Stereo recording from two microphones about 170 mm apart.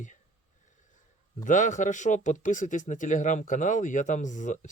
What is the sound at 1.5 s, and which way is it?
Speech, 50° left (ahead or behind).